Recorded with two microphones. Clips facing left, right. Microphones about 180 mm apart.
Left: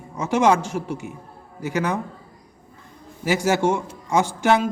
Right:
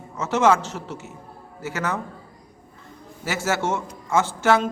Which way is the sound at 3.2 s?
15° left (ahead or behind).